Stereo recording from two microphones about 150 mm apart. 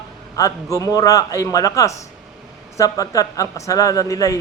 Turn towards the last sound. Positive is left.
turn(degrees=20)  # may be behind; listen again after turning